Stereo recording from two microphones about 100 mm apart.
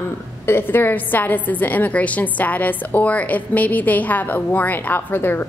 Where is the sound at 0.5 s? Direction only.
20° left (ahead or behind).